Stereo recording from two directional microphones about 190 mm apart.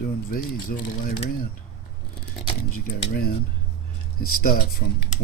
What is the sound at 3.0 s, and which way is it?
Speech, 55° left (ahead or behind).